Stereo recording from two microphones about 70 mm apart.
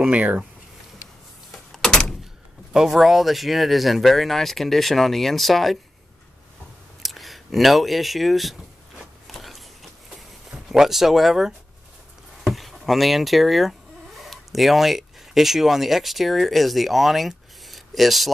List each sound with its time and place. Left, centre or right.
0.0 s speech: right
1.5 s door: centre
2.7 s speech: centre
7.0 s speech: centre
9.3 s a sound: centre
10.7 s speech: centre